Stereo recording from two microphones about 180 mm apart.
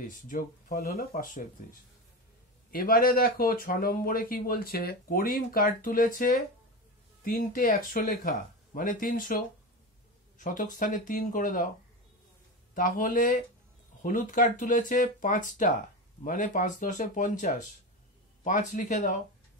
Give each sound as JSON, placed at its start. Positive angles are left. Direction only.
{"t": 0.0, "sound": "speech", "side_deg": 50}
{"t": 12.7, "sound": "speech", "side_deg": 50}